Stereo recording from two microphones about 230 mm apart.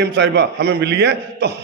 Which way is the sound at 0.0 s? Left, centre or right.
Right.